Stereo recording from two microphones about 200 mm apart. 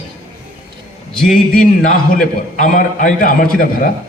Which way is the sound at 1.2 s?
45° left (ahead or behind).